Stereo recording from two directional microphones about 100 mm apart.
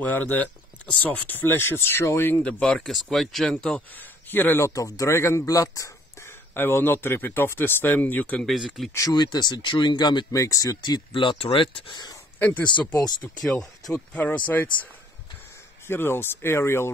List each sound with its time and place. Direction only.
0.0 s speech: 15° left (ahead or behind)
2.4 s speech: 5° left (ahead or behind); by 6.3 s 35° left (ahead or behind)
6.5 s speech: 20° left (ahead or behind)
8.5 s speech: centre (ahead or behind)
9.1 s speech: 45° left (ahead or behind)
10.3 s speech: 30° left (ahead or behind)
11.1 s speech: 65° left (ahead or behind)
12.4 s speech: 15° left (ahead or behind)
12.6 s speech: 50° left (ahead or behind)
13.4 s speech: centre (ahead or behind)
13.9 s speech: 15° left (ahead or behind)
15.9 s speech: 25° left (ahead or behind)